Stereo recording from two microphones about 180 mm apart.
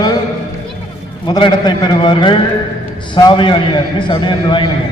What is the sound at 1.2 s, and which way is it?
A man's voice, 25° left (ahead or behind).